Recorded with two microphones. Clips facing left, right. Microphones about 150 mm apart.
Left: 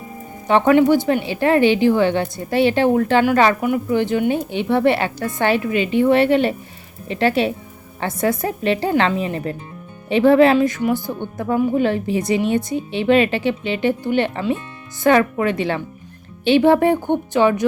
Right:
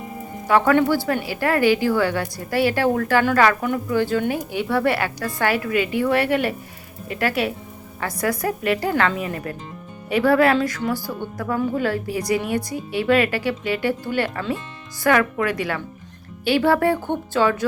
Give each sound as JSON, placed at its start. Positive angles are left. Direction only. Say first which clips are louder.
{"t": 0.4, "sound": "a woman's voice", "louder": "left 4 dB", "side_deg": 20}